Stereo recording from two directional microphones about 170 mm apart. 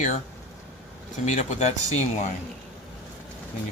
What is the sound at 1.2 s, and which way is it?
Speech, 40° left (ahead or behind).